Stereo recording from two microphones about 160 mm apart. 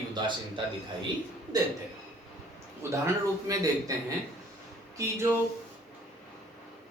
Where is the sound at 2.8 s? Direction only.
20° right (ahead or behind).